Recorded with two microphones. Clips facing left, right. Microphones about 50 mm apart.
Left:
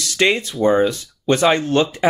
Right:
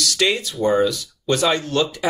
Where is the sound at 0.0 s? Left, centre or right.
Left.